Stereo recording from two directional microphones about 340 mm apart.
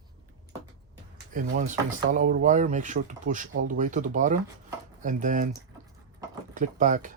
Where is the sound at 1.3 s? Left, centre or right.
Right.